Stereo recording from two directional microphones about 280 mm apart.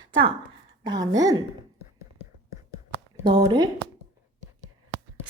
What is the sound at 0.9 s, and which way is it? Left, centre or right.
Speech, centre.